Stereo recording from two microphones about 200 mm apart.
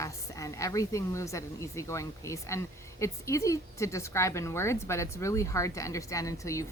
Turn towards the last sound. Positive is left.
turn(degrees=15)  # may be behind; listen again after turning